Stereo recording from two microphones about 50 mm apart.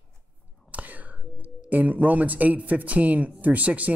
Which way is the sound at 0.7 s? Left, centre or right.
Right.